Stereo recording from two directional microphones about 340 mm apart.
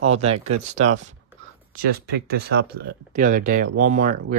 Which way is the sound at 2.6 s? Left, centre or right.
Right.